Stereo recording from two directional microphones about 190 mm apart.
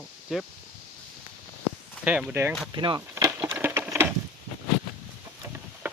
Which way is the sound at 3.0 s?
15° right (ahead or behind).